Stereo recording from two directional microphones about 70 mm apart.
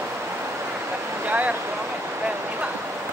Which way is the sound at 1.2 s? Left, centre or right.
Right.